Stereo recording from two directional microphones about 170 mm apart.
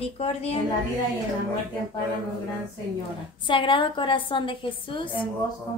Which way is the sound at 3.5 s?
30° left (ahead or behind).